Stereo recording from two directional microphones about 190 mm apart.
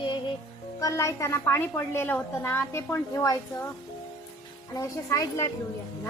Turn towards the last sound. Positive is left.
turn(degrees=15)  # may be behind; listen again after turning